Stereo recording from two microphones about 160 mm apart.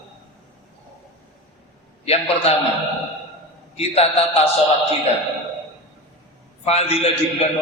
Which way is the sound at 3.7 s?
40° left (ahead or behind).